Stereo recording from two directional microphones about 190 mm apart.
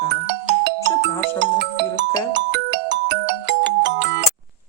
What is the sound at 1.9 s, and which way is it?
Music, 70° right (ahead or behind).